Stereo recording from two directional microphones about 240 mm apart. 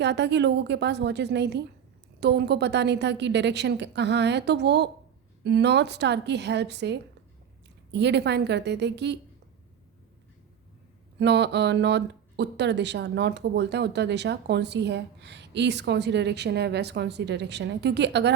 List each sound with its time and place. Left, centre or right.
0.0 s speech: right
11.2 s speech: right